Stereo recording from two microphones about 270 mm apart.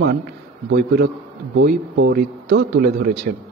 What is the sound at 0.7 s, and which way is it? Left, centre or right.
A man's voice, right.